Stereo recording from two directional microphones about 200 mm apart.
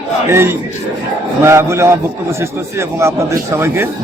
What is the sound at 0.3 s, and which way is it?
A man's voice, 10° right (ahead or behind).